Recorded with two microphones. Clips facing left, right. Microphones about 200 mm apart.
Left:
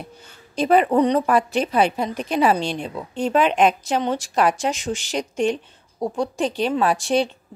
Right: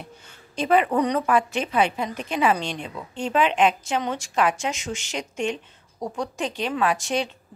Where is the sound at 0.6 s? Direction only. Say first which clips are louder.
Left 4 dB; 40° left (ahead or behind).